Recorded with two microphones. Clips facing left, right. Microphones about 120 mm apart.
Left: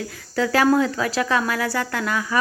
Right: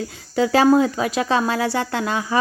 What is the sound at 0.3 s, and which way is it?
Speech, 20° right (ahead or behind).